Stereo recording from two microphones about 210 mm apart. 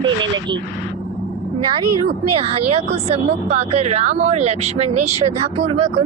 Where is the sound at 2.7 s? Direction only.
30° right (ahead or behind).